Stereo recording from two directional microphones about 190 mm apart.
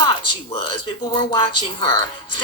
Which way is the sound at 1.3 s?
25° left (ahead or behind).